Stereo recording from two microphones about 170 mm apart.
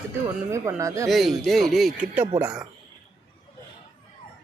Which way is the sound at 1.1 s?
Centre (ahead or behind).